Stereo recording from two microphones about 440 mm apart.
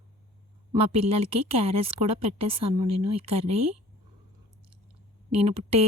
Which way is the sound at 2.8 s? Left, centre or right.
Right.